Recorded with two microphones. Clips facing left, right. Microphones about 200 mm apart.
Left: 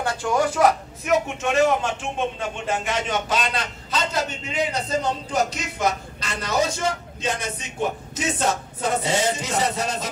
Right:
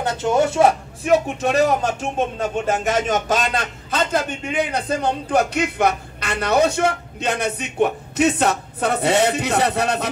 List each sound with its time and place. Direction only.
0.0 s speech: 20° right (ahead or behind); by 10.0 s 65° right (ahead or behind)